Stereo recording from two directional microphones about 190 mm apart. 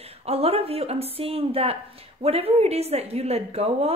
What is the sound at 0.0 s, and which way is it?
A woman's voice, 30° right (ahead or behind).